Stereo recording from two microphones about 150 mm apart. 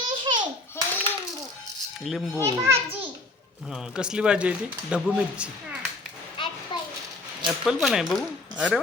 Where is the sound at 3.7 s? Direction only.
5° right (ahead or behind).